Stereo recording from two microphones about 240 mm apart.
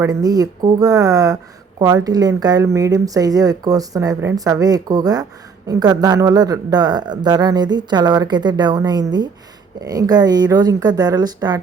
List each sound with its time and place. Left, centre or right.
0.0 s speech: centre